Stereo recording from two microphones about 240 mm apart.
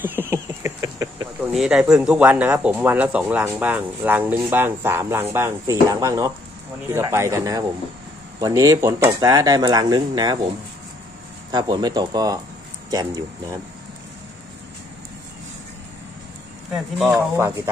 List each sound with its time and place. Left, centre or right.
0.0 s a sound: centre
1.5 s speech: centre
11.5 s speech: centre
17.1 s speech: centre